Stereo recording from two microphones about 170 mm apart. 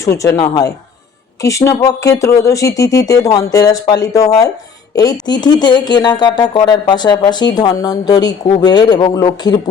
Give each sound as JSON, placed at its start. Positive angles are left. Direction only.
{"t": 0.0, "sound": "speech", "side_deg": 20}
{"t": 1.4, "sound": "speech", "side_deg": 15}